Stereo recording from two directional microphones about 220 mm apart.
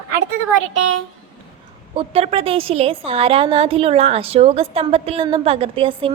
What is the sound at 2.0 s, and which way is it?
A woman's voice, 25° right (ahead or behind).